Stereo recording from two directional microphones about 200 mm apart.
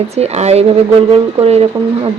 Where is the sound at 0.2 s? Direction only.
35° right (ahead or behind).